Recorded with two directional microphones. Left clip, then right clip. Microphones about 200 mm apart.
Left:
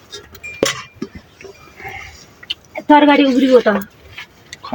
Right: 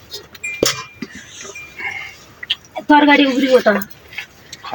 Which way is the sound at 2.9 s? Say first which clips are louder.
Left 1 dB; 15° left (ahead or behind).